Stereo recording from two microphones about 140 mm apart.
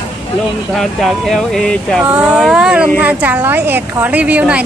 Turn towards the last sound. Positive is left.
turn(degrees=-10)  # may be behind; listen again after turning